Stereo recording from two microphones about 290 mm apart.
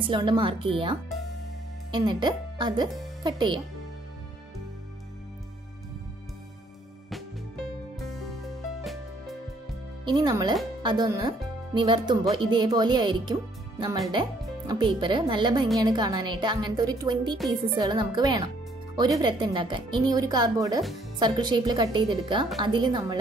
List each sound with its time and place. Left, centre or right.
0.0 s speech: centre
10.0 s speech: centre